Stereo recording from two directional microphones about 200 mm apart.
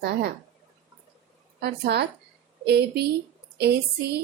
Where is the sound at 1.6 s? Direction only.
55° right (ahead or behind).